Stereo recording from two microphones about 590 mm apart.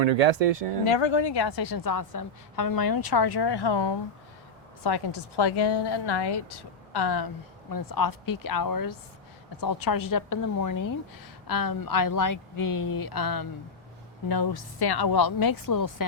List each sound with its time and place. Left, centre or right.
0.0 s speech: right
0.9 s a woman's voice: left